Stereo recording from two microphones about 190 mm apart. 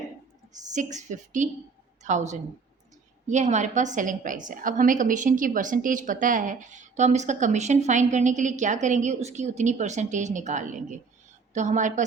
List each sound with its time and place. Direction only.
0.5 s a woman's voice: 40° right (ahead or behind)